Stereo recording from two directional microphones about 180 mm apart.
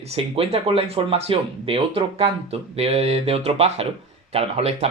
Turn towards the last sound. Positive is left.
turn(degrees=-35)  # may be behind; listen again after turning